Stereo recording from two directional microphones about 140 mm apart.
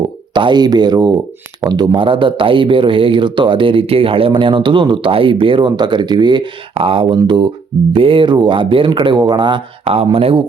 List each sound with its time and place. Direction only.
0.3 s speech: 30° right (ahead or behind)